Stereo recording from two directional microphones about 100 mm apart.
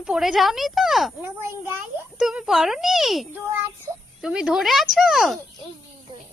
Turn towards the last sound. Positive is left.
turn(degrees=0)  # may be behind; listen again after turning